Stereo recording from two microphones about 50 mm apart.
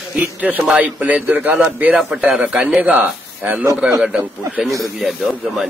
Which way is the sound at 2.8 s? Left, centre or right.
Right.